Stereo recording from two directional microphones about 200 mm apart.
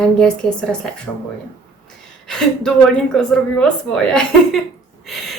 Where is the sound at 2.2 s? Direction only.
Centre (ahead or behind).